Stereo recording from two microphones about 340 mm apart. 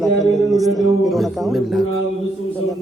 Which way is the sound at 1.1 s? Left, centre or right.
Centre.